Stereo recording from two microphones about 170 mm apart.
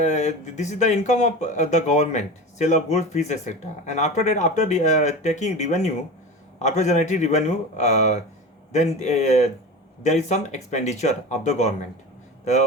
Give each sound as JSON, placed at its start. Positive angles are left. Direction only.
{"t": 0.0, "sound": "speech", "side_deg": 45}